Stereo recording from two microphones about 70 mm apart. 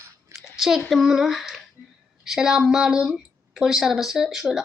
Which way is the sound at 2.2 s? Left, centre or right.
Centre.